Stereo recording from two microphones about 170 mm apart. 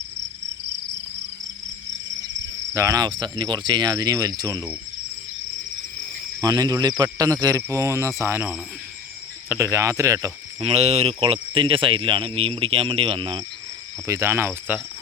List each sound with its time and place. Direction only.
2.7 s speech: 20° right (ahead or behind)
6.4 s speech: 20° right (ahead or behind)
7.4 s cricket: 20° right (ahead or behind)
10.6 s speech: 35° right (ahead or behind)
14.1 s cricket: 15° right (ahead or behind)